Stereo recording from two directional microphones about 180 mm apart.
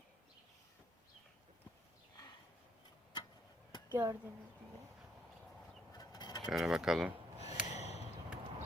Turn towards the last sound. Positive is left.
turn(degrees=35)  # may be behind; listen again after turning